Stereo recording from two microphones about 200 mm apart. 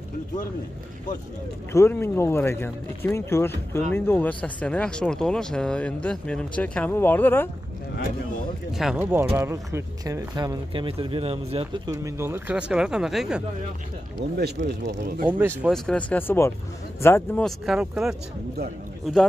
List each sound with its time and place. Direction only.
1.7 s speech: 10° left (ahead or behind)
8.7 s speech: 5° right (ahead or behind)
14.4 s speech: 55° right (ahead or behind)
15.6 s speech: 5° left (ahead or behind)
17.5 s speech: centre (ahead or behind)